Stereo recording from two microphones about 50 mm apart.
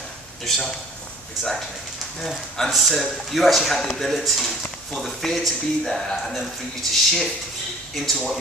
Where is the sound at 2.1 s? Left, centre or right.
Centre.